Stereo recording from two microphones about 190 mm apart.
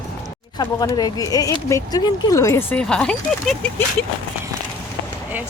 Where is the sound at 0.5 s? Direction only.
20° left (ahead or behind); by 3.7 s 5° left (ahead or behind).